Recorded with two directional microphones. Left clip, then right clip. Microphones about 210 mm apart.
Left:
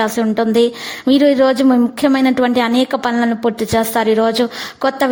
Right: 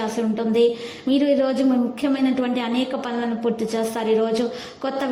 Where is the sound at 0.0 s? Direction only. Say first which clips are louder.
Left 8 dB; 40° left (ahead or behind).